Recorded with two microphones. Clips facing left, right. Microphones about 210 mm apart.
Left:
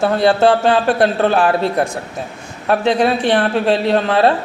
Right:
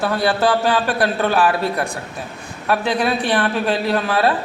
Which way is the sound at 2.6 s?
25° left (ahead or behind).